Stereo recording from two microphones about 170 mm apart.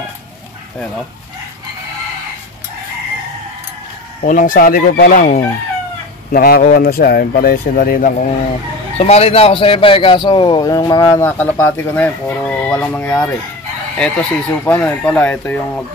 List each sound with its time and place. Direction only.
4.3 s speech: 55° left (ahead or behind)
8.9 s speech: 40° left (ahead or behind); by 15.8 s 10° left (ahead or behind)